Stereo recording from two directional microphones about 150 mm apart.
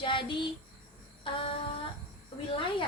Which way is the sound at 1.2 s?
35° left (ahead or behind).